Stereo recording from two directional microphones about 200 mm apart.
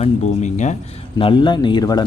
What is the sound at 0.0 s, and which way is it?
Speech, 35° left (ahead or behind).